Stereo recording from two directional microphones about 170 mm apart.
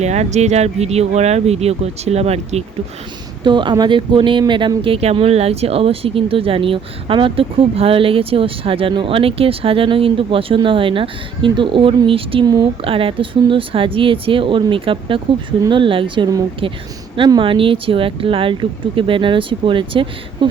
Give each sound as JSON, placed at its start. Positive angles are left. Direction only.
{"t": 0.0, "sound": "speech", "side_deg": -40}
{"t": 3.4, "sound": "speech", "side_deg": -25}